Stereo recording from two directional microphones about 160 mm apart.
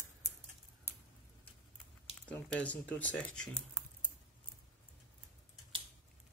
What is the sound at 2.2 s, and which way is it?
Speech, 10° left (ahead or behind).